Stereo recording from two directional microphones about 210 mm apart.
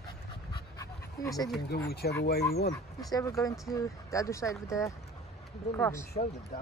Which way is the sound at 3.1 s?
15° left (ahead or behind).